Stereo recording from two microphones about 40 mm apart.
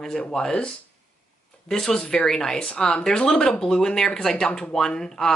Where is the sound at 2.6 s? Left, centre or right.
Left.